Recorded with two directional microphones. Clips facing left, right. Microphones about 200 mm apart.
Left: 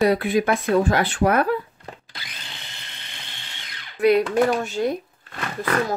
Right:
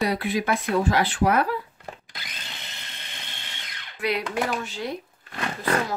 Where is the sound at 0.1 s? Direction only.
50° left (ahead or behind).